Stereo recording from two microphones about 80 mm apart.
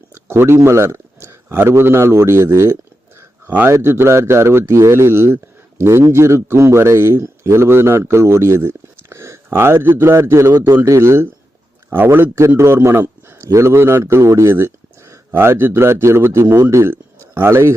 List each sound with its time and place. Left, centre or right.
0.1 s a man's voice: right